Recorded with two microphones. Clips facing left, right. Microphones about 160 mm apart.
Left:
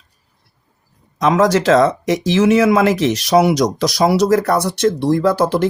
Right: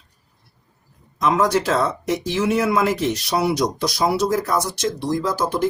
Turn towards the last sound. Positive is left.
turn(degrees=70)  # may be behind; listen again after turning